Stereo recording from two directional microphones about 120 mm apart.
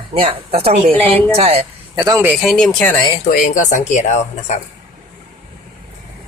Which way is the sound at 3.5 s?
90° left.